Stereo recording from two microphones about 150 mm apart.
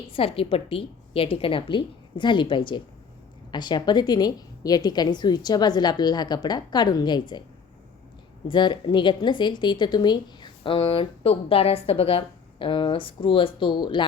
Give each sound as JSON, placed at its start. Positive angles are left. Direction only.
{"t": 0.1, "sound": "a woman's voice", "side_deg": 40}
{"t": 8.4, "sound": "a woman's voice", "side_deg": 30}